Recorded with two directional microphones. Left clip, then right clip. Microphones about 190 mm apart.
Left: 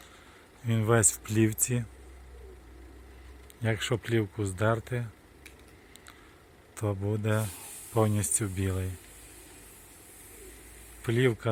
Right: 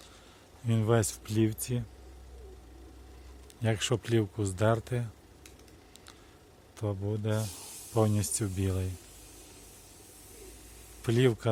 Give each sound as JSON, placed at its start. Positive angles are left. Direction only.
{"t": 0.6, "sound": "speech", "side_deg": -10}
{"t": 3.6, "sound": "speech", "side_deg": -10}
{"t": 6.7, "sound": "a man's voice", "side_deg": 10}
{"t": 11.0, "sound": "speech", "side_deg": -15}